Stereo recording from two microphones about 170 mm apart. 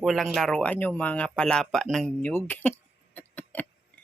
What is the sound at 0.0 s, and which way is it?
Speech, centre (ahead or behind).